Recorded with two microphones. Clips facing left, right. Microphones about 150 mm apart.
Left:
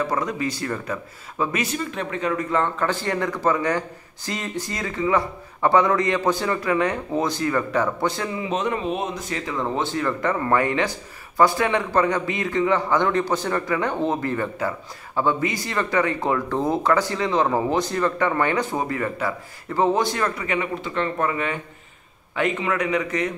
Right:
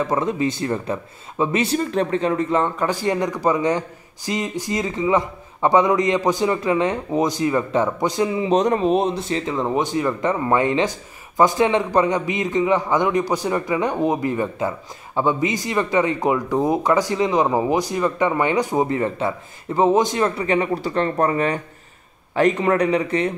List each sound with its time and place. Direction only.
0.0 s speech: 25° right (ahead or behind)
2.6 s speech: 15° right (ahead or behind)
8.5 s speech: 40° right (ahead or behind)